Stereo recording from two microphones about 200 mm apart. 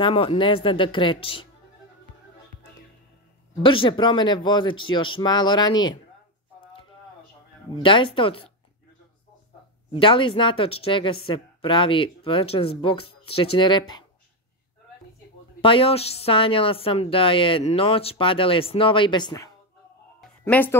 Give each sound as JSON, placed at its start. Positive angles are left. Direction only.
{"t": 0.0, "sound": "a woman's voice", "side_deg": 30}
{"t": 3.6, "sound": "a woman's voice", "side_deg": 25}
{"t": 7.7, "sound": "a woman's voice", "side_deg": 25}
{"t": 9.9, "sound": "a woman's voice", "side_deg": 25}
{"t": 15.6, "sound": "a woman's voice", "side_deg": 25}
{"t": 20.2, "sound": "music", "side_deg": 10}